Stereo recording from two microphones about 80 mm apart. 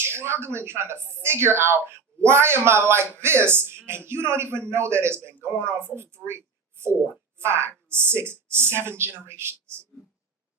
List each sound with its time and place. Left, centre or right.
0.0 s speech: right